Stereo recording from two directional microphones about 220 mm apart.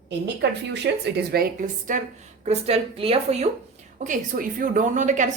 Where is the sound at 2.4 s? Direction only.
30° right (ahead or behind).